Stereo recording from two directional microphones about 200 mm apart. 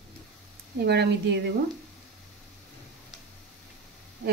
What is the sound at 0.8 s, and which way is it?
Speech, 55° right (ahead or behind).